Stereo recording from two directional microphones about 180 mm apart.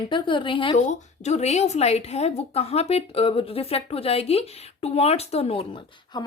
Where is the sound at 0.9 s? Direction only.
40° left (ahead or behind).